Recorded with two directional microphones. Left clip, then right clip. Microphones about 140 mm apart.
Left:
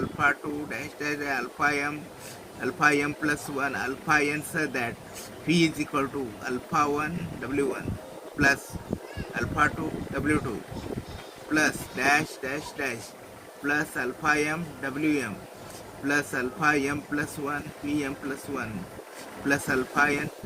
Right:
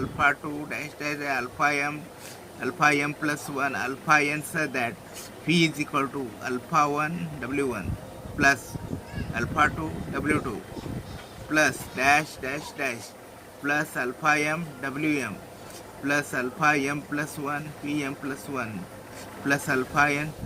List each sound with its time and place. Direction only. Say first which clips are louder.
0.2 s speech: right 2 dB; 45° right (ahead or behind)
9.3 s speech: right 2 dB; 45° right (ahead or behind)
11.5 s speech: right 2 dB; 45° right (ahead or behind)
19.5 s speech: right 1 dB; 40° right (ahead or behind)